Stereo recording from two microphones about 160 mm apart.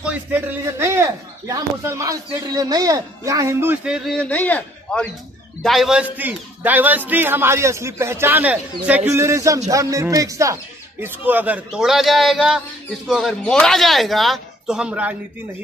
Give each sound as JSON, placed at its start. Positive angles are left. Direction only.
{"t": 0.0, "sound": "a man's voice", "side_deg": -10}
{"t": 5.6, "sound": "a man's voice", "side_deg": 0}